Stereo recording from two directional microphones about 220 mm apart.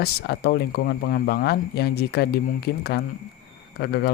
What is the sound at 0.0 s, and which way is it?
Speech, 45° left (ahead or behind).